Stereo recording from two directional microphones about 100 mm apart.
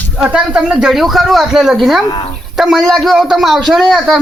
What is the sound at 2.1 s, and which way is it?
Speech, 60° left (ahead or behind).